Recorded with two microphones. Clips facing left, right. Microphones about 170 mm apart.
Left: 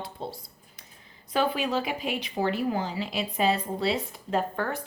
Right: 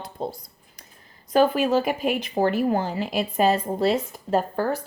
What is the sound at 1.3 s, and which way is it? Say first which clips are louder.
Speech: right 7 dB; 45° right (ahead or behind).